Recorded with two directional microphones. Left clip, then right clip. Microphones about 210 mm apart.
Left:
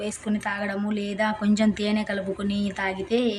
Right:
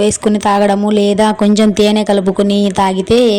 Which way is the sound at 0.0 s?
40° right (ahead or behind).